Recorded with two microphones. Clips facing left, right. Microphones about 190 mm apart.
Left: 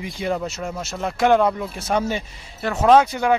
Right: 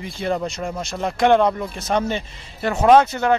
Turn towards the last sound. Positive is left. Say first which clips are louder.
# even
turn(degrees=10)  # may be behind; listen again after turning